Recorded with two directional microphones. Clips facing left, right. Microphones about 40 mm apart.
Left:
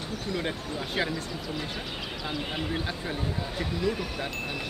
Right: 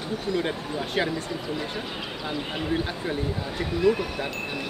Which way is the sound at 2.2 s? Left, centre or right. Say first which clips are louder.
Right 3 dB; centre.